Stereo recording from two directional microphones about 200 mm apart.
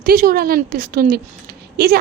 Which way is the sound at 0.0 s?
45° right (ahead or behind).